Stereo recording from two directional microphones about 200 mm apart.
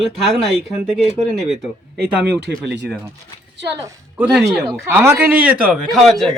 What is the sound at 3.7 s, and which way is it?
A woman's voice, 15° right (ahead or behind).